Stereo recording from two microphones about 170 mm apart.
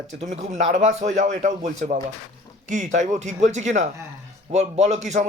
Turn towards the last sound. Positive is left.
turn(degrees=-45)  # may be behind; listen again after turning